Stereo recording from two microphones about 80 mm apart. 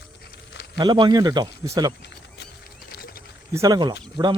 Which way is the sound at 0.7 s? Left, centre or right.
Right.